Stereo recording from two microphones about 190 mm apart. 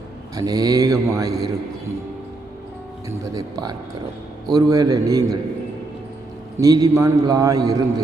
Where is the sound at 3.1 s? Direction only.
20° right (ahead or behind).